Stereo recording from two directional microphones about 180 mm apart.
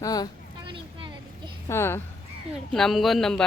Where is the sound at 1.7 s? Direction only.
15° left (ahead or behind).